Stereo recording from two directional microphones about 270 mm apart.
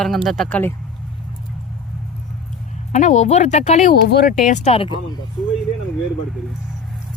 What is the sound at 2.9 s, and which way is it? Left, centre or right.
Speech, left.